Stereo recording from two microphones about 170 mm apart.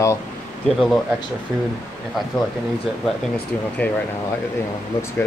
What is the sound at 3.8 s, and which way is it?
Speech, 10° left (ahead or behind).